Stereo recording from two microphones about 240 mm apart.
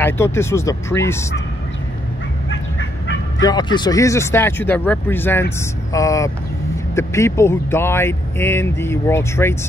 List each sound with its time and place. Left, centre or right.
0.0 s speech: centre
2.5 s fowl: left
3.4 s speech: centre